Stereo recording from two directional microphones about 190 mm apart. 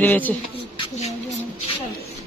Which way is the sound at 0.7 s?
25° left (ahead or behind).